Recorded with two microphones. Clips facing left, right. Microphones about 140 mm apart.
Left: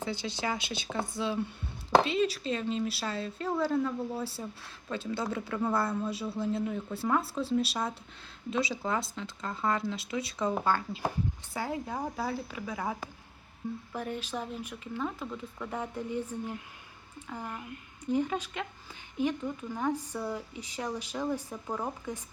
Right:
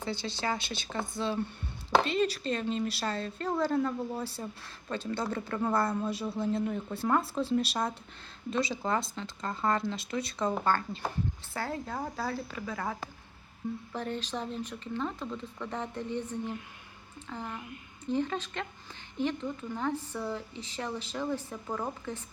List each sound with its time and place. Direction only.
0.0 s speech: 10° left (ahead or behind)